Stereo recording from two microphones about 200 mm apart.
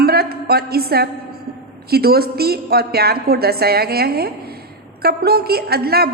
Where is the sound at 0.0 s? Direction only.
50° right (ahead or behind).